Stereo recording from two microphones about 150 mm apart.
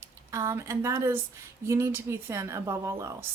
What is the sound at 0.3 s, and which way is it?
Speech, 20° right (ahead or behind).